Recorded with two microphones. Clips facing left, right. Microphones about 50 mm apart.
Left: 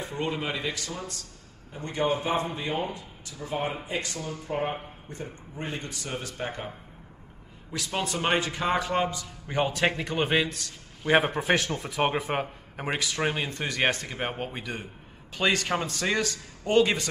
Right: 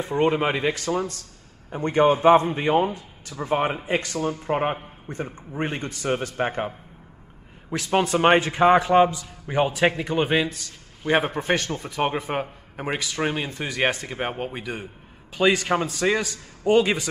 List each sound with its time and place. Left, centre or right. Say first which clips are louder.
0.1 s speech: right 11 dB; right
7.7 s a man's voice: right 9 dB; right
9.2 s a man's voice: right 5 dB; centre